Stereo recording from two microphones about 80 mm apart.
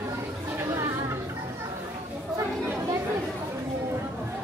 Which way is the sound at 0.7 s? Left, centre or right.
Right.